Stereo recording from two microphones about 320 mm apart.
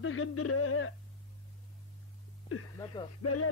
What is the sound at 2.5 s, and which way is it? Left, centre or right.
Speech, left.